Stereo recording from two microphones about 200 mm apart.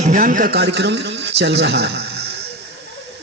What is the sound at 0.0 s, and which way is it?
A man's voice, 40° right (ahead or behind).